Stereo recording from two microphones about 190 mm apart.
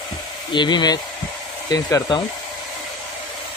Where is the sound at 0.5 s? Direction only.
25° left (ahead or behind).